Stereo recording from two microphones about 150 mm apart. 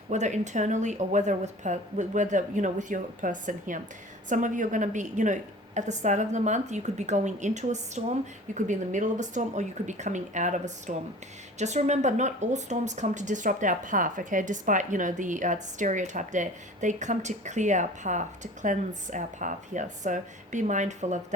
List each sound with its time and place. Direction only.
0.1 s a woman's voice: 50° right (ahead or behind)